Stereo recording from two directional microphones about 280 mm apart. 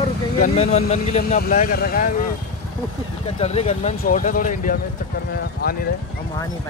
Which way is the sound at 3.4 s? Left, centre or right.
Left.